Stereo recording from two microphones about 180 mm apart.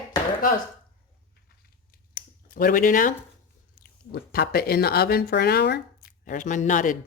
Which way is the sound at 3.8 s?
60° left (ahead or behind).